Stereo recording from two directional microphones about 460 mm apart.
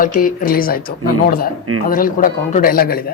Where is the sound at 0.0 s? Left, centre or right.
Centre.